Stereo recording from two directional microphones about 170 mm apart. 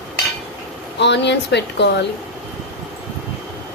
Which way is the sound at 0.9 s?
90° left.